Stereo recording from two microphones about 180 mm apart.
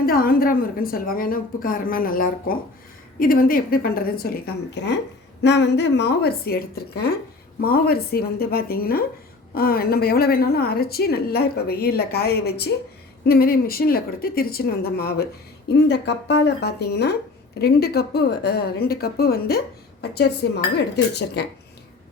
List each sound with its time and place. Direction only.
0.0 s a woman's voice: 55° left (ahead or behind)